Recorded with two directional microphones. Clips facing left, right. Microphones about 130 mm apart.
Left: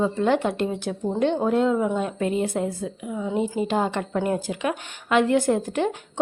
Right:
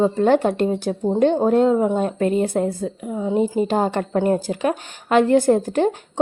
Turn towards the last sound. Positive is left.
turn(degrees=-35)  # may be behind; listen again after turning